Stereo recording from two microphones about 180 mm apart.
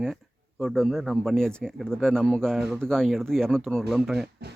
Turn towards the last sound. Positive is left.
turn(degrees=0)  # may be behind; listen again after turning